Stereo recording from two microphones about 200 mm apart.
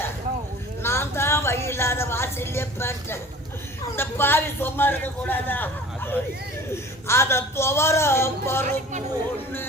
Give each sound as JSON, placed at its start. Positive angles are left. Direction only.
{"t": 0.8, "sound": "music", "side_deg": 10}
{"t": 3.9, "sound": "a man's voice", "side_deg": 10}
{"t": 8.6, "sound": "speech", "side_deg": -35}